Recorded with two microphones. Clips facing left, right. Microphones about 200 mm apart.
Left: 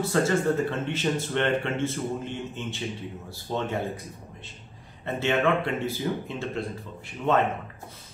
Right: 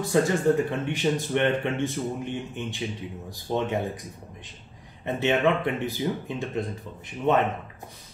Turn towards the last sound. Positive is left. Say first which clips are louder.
# right 1 dB
turn(degrees=-20)  # may be behind; listen again after turning